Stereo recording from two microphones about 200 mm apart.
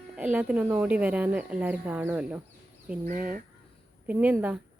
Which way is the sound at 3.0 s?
45° right (ahead or behind).